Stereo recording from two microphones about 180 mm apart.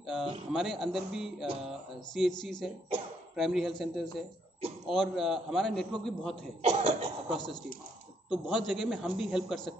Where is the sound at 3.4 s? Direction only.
Centre (ahead or behind).